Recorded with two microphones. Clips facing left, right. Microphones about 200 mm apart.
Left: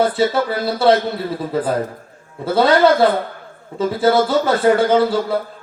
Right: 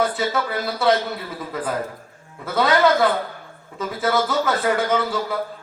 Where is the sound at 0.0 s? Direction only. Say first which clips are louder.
Left 6 dB; 30° left (ahead or behind).